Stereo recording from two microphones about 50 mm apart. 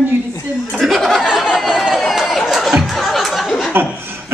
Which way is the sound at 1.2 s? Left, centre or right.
Centre.